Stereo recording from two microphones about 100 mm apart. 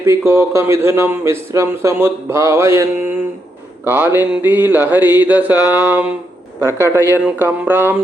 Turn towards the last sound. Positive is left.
turn(degrees=-20)  # may be behind; listen again after turning